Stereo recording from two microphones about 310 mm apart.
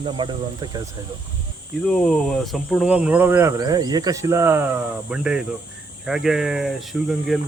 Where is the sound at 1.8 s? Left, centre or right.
Centre.